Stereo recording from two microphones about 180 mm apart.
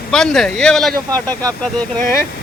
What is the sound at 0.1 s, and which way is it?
Speech, 5° left (ahead or behind).